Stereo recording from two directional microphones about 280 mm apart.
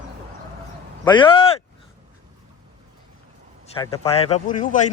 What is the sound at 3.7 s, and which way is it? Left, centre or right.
Speech, centre.